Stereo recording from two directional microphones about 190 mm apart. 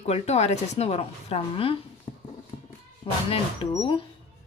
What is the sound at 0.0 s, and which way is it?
A woman's voice, 35° left (ahead or behind).